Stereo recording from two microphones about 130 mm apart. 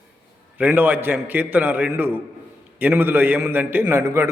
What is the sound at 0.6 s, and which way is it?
A man's voice, 10° right (ahead or behind).